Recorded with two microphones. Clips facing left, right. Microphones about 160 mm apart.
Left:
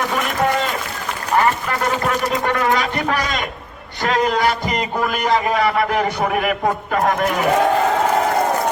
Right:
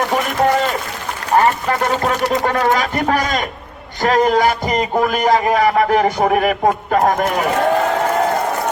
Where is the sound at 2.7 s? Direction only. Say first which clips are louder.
Right 3 dB; 45° right (ahead or behind).